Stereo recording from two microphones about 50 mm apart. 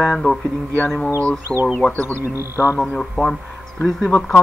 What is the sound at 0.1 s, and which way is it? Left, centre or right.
Mantra, centre.